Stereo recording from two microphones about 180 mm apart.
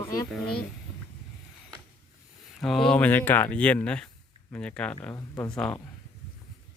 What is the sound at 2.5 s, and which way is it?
Speech, centre (ahead or behind).